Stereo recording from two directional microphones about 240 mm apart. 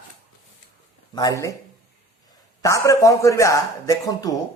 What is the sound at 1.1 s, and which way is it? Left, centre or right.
Speech, centre.